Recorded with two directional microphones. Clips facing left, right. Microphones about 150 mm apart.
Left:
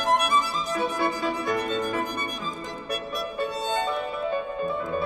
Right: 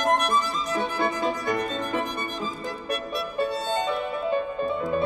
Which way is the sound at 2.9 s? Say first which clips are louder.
Right 1 dB; centre (ahead or behind).